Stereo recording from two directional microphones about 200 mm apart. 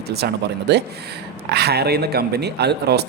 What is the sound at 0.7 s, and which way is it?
Speech, 60° right (ahead or behind).